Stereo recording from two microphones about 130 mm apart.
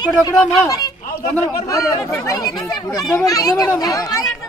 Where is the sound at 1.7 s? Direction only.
20° left (ahead or behind).